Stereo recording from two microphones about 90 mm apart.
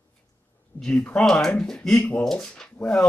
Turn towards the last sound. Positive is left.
turn(degrees=10)  # may be behind; listen again after turning